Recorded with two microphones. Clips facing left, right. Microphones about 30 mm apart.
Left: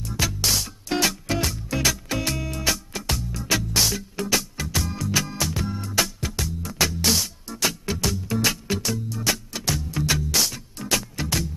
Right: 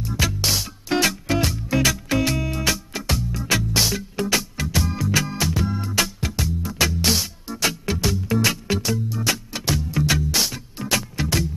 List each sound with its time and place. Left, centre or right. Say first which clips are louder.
0.0 s music: right 2 dB; centre